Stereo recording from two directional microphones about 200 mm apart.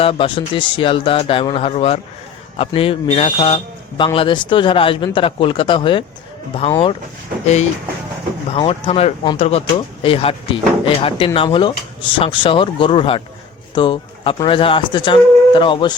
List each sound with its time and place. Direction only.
0.0 s a man's voice: 25° left (ahead or behind)
8.5 s a man's voice: 30° left (ahead or behind)